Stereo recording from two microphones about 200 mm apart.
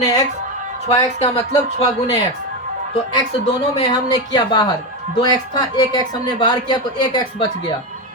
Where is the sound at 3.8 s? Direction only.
20° left (ahead or behind).